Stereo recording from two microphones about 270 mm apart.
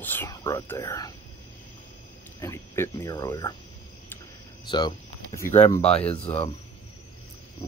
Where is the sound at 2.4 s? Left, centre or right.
Centre.